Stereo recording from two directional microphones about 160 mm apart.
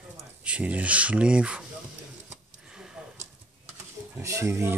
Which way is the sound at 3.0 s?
5° right (ahead or behind).